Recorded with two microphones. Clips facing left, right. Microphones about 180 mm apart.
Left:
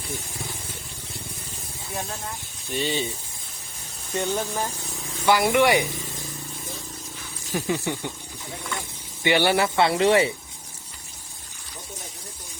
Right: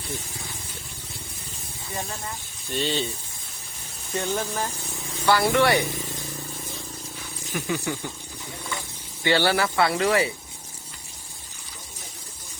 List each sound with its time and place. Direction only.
1.9 s speech: centre (ahead or behind)
4.1 s speech: centre (ahead or behind)
5.2 s speech: 15° left (ahead or behind)
7.5 s speech: 25° left (ahead or behind)
9.2 s speech: 15° left (ahead or behind)